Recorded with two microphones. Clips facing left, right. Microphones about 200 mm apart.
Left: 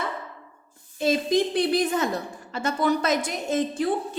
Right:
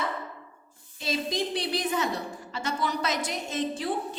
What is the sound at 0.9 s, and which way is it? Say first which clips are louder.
A woman's voice: left 8 dB; 50° left (ahead or behind).